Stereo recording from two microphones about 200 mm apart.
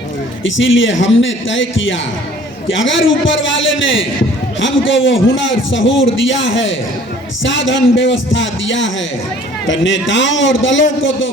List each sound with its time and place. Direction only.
0.4 s a man's voice: 70° left (ahead or behind)